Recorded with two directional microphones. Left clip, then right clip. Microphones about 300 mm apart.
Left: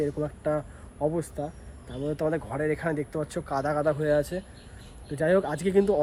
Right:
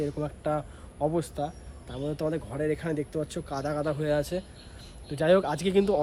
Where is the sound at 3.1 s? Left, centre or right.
Centre.